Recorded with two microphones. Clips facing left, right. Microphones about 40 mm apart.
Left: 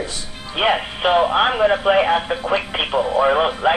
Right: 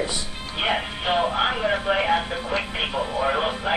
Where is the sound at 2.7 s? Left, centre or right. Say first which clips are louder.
Left 4 dB; left.